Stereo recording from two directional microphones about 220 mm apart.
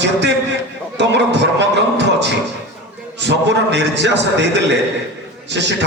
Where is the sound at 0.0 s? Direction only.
50° right (ahead or behind).